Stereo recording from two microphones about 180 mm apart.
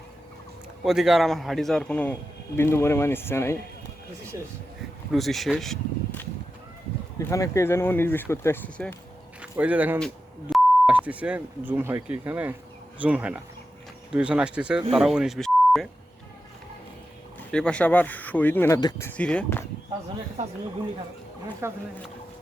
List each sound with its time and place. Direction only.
0.9 s a man's voice: centre (ahead or behind); by 3.6 s 15° left (ahead or behind)
4.3 s speech: 15° right (ahead or behind)
5.1 s speech: centre (ahead or behind)
7.2 s speech: 15° left (ahead or behind)
9.4 s a man's voice: 10° right (ahead or behind)
17.5 s speech: 5° left (ahead or behind)
21.6 s speech: 15° right (ahead or behind)